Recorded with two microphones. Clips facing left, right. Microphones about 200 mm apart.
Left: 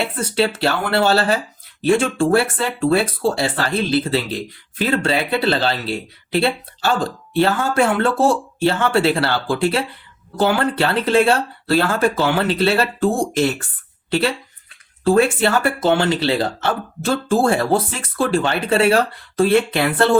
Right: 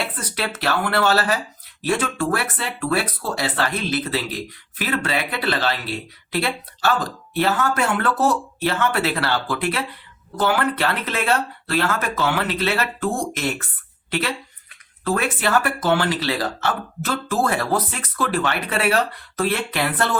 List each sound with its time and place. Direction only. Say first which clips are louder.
0.0 s speech: left 8 dB; 25° left (ahead or behind)